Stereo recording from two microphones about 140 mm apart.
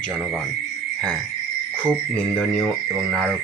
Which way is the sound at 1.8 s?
10° right (ahead or behind).